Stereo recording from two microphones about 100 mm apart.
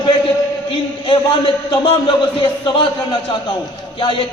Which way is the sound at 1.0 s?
55° left (ahead or behind).